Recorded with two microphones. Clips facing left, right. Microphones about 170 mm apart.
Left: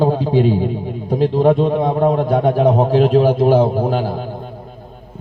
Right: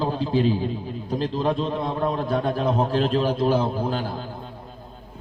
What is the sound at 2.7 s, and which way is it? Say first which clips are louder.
A man's voice: left 7 dB; 45° left (ahead or behind).